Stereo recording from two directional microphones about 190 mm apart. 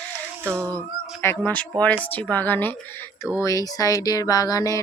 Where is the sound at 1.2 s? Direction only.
10° left (ahead or behind).